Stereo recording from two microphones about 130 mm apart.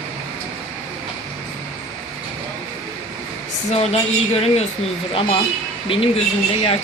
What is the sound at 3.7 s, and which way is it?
Speech, 50° left (ahead or behind).